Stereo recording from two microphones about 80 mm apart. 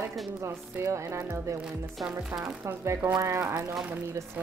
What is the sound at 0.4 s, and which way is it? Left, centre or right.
Speech, right.